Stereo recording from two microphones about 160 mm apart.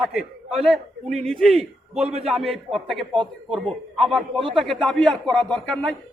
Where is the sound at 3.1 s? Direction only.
30° right (ahead or behind).